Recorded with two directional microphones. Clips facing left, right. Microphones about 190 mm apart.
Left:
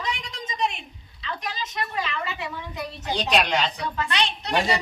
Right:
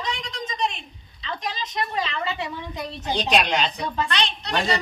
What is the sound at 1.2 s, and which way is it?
Speech, 25° right (ahead or behind).